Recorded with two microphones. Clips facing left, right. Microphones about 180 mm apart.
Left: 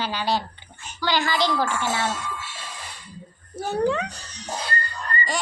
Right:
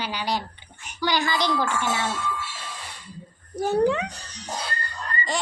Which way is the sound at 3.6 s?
15° right (ahead or behind).